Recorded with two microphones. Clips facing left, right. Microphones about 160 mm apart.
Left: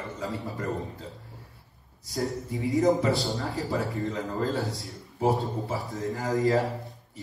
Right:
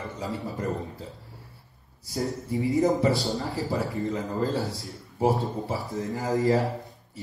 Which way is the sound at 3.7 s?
20° right (ahead or behind).